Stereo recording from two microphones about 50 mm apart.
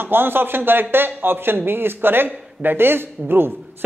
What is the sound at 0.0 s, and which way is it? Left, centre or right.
A man's voice, right.